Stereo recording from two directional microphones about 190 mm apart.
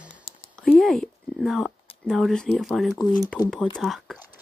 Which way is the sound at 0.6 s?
5° left (ahead or behind).